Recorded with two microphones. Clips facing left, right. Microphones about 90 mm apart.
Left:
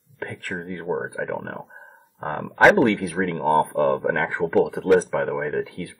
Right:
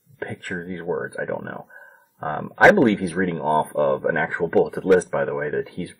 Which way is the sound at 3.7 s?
Centre (ahead or behind).